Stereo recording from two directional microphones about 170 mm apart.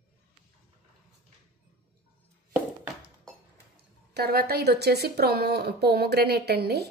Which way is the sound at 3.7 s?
65° right (ahead or behind).